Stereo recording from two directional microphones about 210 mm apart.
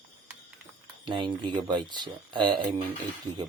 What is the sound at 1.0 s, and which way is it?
Speech, 20° right (ahead or behind).